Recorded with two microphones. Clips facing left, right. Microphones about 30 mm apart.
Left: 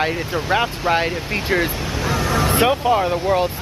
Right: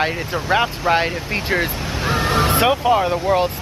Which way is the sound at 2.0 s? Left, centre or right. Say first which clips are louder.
Right 2 dB; right.